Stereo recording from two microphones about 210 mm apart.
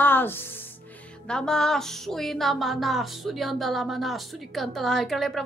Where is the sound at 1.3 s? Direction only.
5° left (ahead or behind).